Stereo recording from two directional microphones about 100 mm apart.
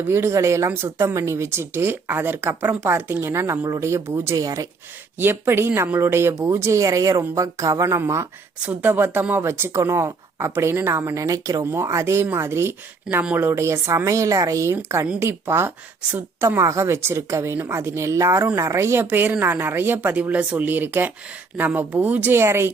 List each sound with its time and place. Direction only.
0.0 s a woman's voice: 25° right (ahead or behind)
5.2 s a woman's voice: 25° right (ahead or behind)